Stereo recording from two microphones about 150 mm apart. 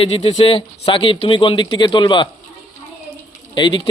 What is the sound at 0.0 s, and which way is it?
Speech, 40° left (ahead or behind).